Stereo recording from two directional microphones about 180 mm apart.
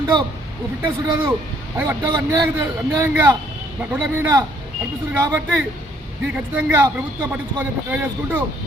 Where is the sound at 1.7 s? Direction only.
20° right (ahead or behind).